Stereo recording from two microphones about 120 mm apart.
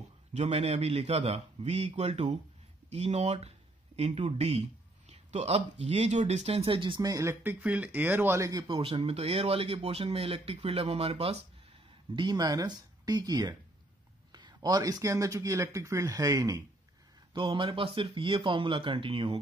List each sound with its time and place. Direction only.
0.3 s a man's voice: 65° right (ahead or behind); by 7.0 s 45° right (ahead or behind)
7.0 s speech: 30° right (ahead or behind)
7.6 s speech: 10° right (ahead or behind)
8.6 s speech: 50° right (ahead or behind)
12.2 s speech: 35° right (ahead or behind)
17.3 s speech: 45° right (ahead or behind)